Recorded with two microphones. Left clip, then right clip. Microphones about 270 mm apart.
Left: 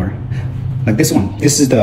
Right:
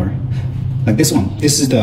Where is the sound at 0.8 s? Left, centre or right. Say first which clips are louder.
Even; centre.